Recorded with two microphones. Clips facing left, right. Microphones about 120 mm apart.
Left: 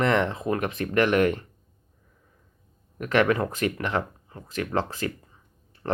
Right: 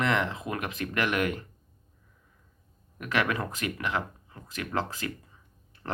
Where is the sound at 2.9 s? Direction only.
45° left (ahead or behind).